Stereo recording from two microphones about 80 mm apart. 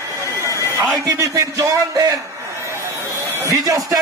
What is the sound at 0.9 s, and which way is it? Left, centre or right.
A man's voice, right.